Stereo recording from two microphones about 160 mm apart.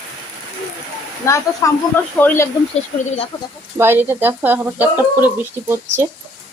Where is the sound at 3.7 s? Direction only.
15° right (ahead or behind).